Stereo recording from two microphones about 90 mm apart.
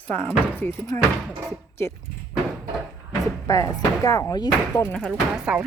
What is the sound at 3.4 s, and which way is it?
Speech, 35° left (ahead or behind).